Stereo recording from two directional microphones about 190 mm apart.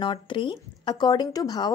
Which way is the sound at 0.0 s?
25° left (ahead or behind).